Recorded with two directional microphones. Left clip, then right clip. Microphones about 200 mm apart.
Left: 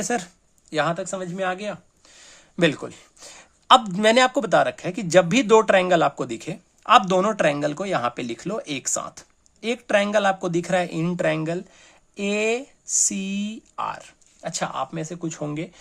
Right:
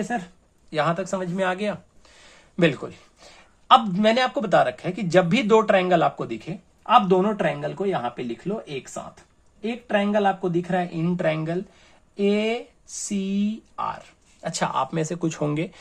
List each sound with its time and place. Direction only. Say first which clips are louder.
0.7 s speech: even; 30° left (ahead or behind)
0.9 s speech: right 2 dB; 10° left (ahead or behind)
3.2 s speech: left 4 dB; 35° left (ahead or behind)
14.4 s speech: right 3 dB; 10° left (ahead or behind)